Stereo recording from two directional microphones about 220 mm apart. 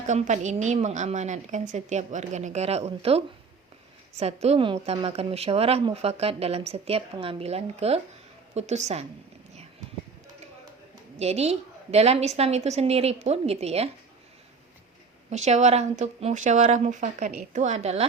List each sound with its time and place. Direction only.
0.1 s a woman's voice: 30° right (ahead or behind)
11.2 s speech: 30° right (ahead or behind)
15.3 s a woman's voice: 30° right (ahead or behind)